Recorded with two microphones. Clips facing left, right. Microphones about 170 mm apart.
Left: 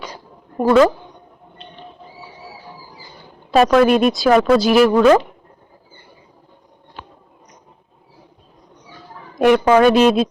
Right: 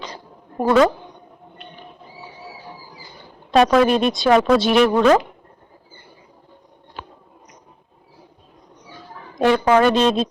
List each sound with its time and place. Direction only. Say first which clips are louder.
0.6 s speech: left 3 dB; centre (ahead or behind)
3.5 s speech: left 2 dB; centre (ahead or behind)
9.4 s speech: left 3 dB; 15° left (ahead or behind)